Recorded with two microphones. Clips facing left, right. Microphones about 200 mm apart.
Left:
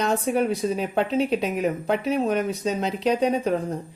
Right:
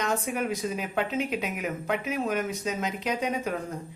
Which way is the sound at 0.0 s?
35° left (ahead or behind).